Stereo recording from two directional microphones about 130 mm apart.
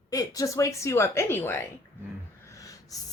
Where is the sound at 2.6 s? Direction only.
25° left (ahead or behind).